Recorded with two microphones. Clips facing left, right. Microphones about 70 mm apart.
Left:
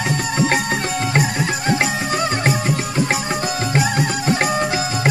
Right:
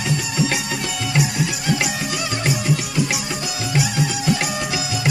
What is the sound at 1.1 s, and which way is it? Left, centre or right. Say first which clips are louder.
Music: even; left.